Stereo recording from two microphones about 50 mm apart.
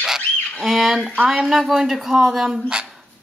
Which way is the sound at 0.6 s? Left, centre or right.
Centre.